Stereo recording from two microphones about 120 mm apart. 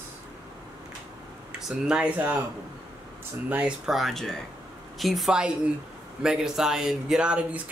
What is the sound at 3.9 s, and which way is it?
Speech, centre (ahead or behind).